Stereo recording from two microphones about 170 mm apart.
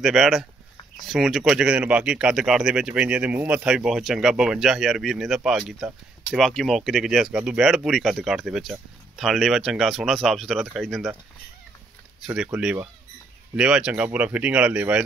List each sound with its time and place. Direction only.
0.0 s speech: centre (ahead or behind)
12.2 s speech: 5° right (ahead or behind)
13.6 s speech: 5° right (ahead or behind)